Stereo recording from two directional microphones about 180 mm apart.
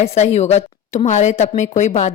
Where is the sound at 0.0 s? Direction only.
35° left (ahead or behind).